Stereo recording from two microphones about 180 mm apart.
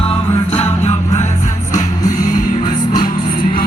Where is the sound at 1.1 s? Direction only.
40° left (ahead or behind).